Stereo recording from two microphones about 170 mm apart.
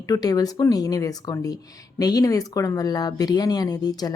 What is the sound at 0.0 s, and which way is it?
Speech, 20° left (ahead or behind).